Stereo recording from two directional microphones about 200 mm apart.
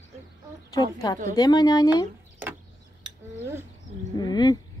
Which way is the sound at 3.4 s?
10° right (ahead or behind).